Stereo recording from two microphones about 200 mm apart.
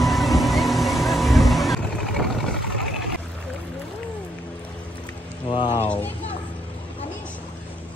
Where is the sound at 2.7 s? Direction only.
Centre (ahead or behind).